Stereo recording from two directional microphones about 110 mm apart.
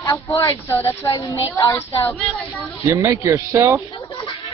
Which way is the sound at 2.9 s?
25° right (ahead or behind).